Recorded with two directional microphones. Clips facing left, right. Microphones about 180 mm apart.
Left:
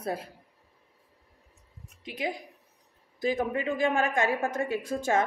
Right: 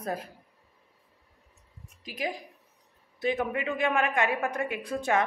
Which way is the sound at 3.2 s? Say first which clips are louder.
Left 1 dB; 35° left (ahead or behind).